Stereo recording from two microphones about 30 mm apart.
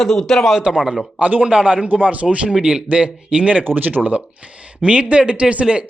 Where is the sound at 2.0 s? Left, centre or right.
Right.